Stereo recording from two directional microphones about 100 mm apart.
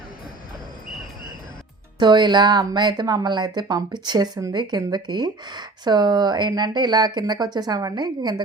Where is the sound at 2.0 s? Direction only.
50° right (ahead or behind).